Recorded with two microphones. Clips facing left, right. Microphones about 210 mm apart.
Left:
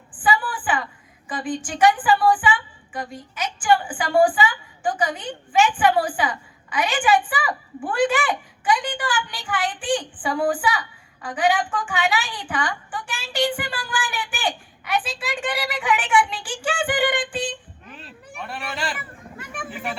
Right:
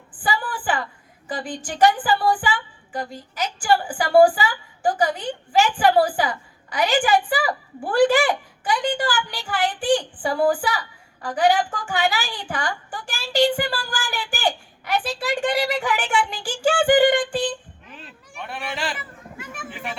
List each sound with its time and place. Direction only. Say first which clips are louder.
0.2 s a sound: left 3 dB; 40° right (ahead or behind)
1.3 s a woman's voice: left 2 dB; 40° right (ahead or behind)
18.3 s speech: right 1 dB; centre (ahead or behind)